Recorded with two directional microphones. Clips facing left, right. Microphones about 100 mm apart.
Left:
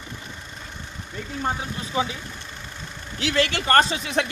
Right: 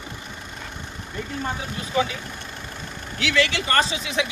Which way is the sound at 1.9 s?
20° left (ahead or behind).